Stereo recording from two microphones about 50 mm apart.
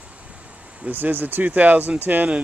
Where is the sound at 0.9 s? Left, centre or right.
Right.